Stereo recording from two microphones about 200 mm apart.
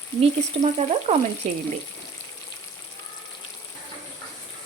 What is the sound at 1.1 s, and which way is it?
Speech, 35° right (ahead or behind).